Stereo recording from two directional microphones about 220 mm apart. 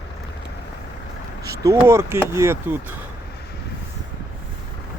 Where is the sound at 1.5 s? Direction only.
15° right (ahead or behind).